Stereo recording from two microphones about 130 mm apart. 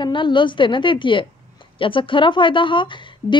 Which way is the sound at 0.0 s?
40° left (ahead or behind).